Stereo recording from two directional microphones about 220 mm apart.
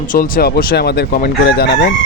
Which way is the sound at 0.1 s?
40° left (ahead or behind).